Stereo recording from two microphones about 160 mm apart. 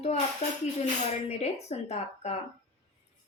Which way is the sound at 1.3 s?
40° left (ahead or behind).